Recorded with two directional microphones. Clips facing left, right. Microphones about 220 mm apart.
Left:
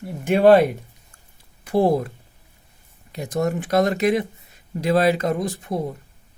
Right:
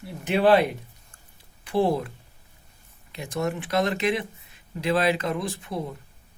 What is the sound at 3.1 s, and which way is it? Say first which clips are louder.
Speech: left 5 dB; 40° left (ahead or behind).